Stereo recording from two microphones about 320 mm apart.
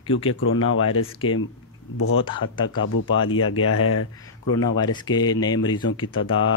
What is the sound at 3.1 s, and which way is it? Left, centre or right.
Speech, left.